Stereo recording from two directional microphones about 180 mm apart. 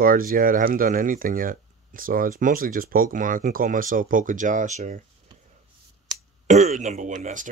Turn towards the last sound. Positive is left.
turn(degrees=-45)  # may be behind; listen again after turning